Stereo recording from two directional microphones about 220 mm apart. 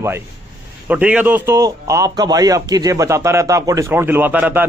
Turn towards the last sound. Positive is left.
turn(degrees=-10)  # may be behind; listen again after turning